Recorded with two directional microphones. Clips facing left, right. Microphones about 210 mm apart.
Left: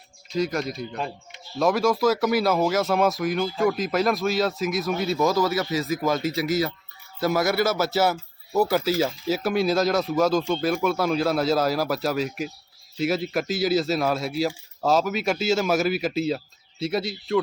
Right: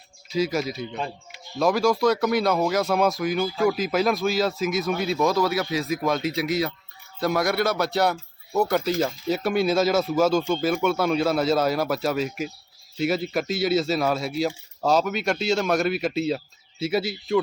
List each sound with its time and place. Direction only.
0.3 s speech: centre (ahead or behind)